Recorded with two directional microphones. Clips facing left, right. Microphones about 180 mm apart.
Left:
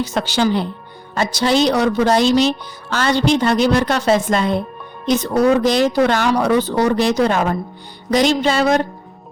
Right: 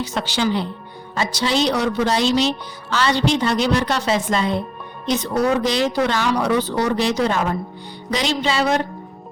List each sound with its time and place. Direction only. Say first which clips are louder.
0.0 s speech: left 4 dB; 45° left (ahead or behind)